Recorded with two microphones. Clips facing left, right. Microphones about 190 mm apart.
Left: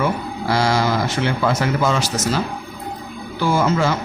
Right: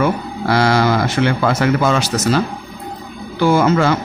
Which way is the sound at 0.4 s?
65° right (ahead or behind).